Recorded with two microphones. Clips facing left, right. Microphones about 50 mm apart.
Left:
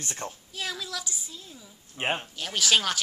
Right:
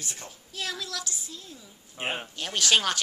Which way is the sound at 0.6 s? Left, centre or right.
Centre.